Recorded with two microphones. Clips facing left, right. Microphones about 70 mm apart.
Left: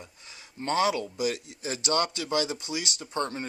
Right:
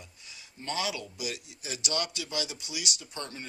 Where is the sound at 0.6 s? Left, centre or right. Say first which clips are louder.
Left 8 dB; left.